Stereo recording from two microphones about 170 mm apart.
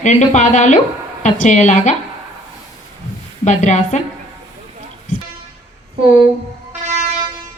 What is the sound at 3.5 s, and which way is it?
Speech, 45° left (ahead or behind).